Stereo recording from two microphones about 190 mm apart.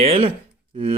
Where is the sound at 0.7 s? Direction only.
30° right (ahead or behind).